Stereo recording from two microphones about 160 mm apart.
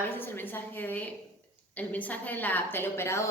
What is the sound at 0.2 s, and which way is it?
A woman's voice, 10° left (ahead or behind).